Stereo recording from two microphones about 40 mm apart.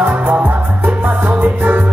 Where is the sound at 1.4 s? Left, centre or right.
Right.